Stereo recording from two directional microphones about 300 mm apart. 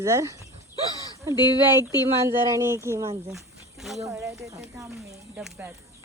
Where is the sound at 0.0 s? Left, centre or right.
Centre.